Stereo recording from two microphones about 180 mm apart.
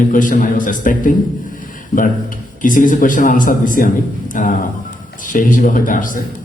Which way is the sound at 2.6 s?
45° left (ahead or behind).